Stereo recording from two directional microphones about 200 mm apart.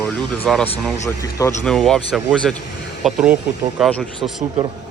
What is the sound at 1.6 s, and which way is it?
Speech, 5° left (ahead or behind).